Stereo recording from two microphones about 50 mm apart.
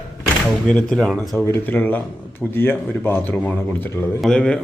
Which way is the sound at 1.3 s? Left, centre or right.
Left.